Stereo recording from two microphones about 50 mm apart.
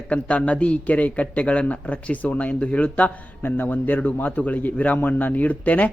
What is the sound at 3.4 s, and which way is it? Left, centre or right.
A man's voice, left.